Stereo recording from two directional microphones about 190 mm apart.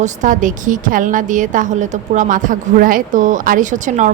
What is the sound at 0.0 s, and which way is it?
A woman's voice, 40° right (ahead or behind).